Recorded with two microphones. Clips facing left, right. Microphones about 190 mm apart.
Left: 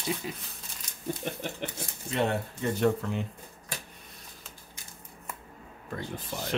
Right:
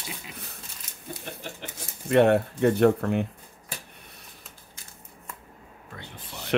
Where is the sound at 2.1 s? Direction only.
65° right (ahead or behind).